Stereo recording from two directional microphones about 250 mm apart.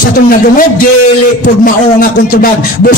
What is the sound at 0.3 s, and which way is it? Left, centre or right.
A man's voice, left.